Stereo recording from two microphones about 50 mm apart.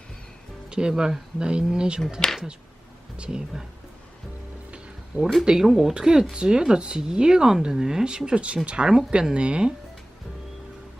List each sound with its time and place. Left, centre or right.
0.7 s speech: centre
3.2 s speech: centre
5.1 s speech: right
5.5 s speech: centre